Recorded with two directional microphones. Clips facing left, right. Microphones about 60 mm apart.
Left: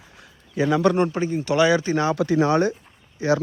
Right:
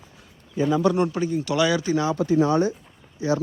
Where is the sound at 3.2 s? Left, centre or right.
Left.